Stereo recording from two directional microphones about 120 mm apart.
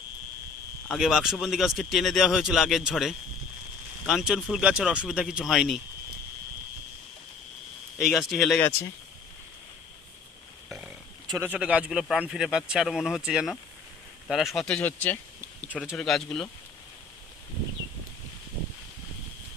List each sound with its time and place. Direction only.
0.9 s speech: centre (ahead or behind)
7.9 s speech: centre (ahead or behind)
11.3 s speech: 10° right (ahead or behind)
14.8 s speech: 15° left (ahead or behind)
16.0 s speech: 5° left (ahead or behind)